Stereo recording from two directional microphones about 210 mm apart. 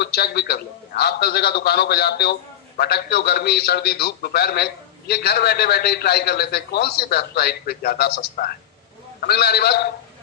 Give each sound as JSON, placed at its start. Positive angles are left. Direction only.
{"t": 0.0, "sound": "a man's voice", "side_deg": 50}